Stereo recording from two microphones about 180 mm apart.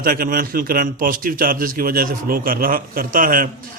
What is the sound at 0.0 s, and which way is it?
A man's voice, 55° right (ahead or behind).